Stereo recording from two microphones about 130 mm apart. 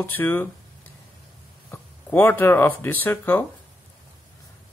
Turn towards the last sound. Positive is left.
turn(degrees=15)  # may be behind; listen again after turning